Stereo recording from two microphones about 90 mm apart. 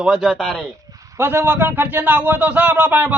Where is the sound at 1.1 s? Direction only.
25° right (ahead or behind).